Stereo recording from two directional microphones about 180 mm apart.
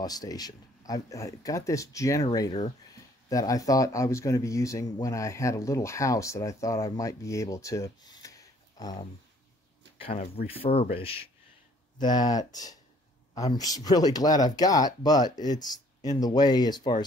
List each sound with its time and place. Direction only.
0.0 s speech: 20° left (ahead or behind)
3.3 s speech: 20° left (ahead or behind)
9.9 s speech: 30° left (ahead or behind)